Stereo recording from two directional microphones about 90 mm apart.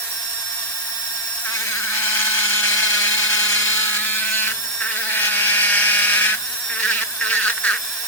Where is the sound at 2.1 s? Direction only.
25° left (ahead or behind).